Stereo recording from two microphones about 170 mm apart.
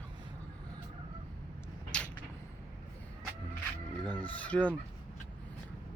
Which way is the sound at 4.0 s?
10° left (ahead or behind).